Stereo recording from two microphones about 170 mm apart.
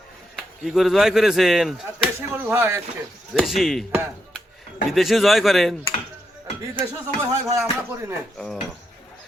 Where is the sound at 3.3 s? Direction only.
Centre (ahead or behind).